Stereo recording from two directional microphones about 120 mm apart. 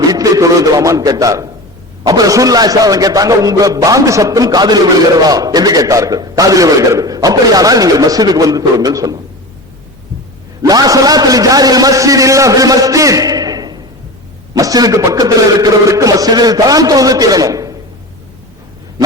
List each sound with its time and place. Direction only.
0.0 s a man's voice: 30° right (ahead or behind)
10.6 s a man's voice: 30° right (ahead or behind)